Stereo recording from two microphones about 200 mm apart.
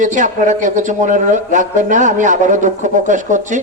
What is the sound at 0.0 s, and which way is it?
Speech, 40° right (ahead or behind).